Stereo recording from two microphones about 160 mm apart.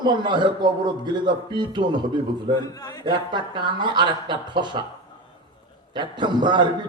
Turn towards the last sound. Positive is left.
turn(degrees=-30)  # may be behind; listen again after turning